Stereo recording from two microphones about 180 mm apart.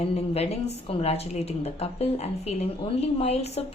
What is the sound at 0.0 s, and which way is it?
A woman's voice, 35° left (ahead or behind).